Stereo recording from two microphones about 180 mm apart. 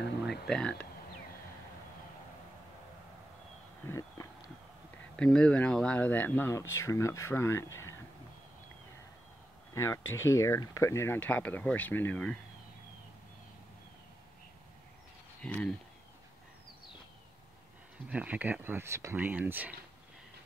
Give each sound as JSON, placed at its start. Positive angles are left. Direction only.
{"t": 0.3, "sound": "speech", "side_deg": 5}
{"t": 3.8, "sound": "a sound", "side_deg": 15}
{"t": 5.1, "sound": "speech", "side_deg": 5}
{"t": 10.1, "sound": "speech", "side_deg": 15}
{"t": 15.4, "sound": "speech", "side_deg": 5}
{"t": 18.1, "sound": "speech", "side_deg": -10}